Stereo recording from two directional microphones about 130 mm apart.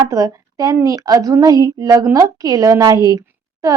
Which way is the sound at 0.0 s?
25° right (ahead or behind).